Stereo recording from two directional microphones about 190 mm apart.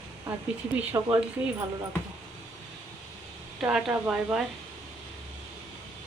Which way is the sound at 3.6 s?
5° right (ahead or behind).